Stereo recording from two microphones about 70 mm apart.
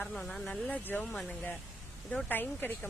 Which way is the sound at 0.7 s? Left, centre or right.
Left.